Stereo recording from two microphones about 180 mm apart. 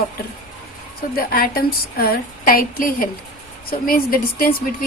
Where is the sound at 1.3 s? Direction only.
55° left (ahead or behind).